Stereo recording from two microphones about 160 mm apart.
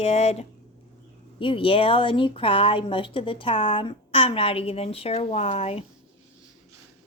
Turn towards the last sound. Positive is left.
turn(degrees=40)  # may be behind; listen again after turning